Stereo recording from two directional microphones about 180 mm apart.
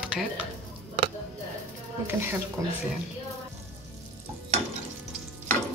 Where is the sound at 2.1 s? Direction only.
10° right (ahead or behind).